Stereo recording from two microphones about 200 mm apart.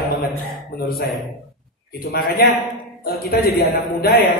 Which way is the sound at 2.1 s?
50° left (ahead or behind).